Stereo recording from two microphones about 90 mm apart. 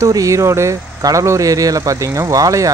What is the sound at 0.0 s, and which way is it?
Speech, 35° right (ahead or behind).